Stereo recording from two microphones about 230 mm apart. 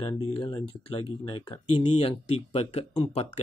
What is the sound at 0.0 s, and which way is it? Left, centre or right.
Speech, left.